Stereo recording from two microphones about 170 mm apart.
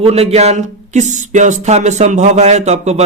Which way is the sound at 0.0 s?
35° right (ahead or behind).